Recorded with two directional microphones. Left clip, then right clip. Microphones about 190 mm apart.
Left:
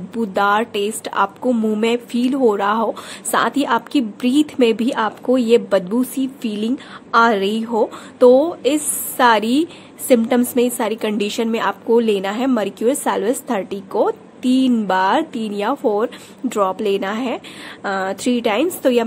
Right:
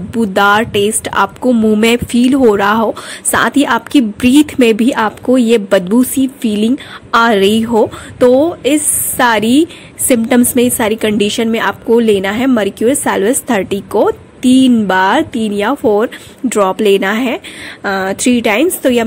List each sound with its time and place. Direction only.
0.1 s a woman's voice: 35° right (ahead or behind)